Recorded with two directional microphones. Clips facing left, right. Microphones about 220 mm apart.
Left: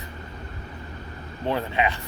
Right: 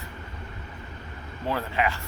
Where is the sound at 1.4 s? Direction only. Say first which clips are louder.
Left 2 dB; 20° left (ahead or behind).